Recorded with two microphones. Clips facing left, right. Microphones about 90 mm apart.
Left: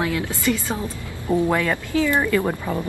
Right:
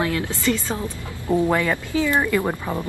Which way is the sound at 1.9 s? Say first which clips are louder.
Left 1 dB; 15° right (ahead or behind).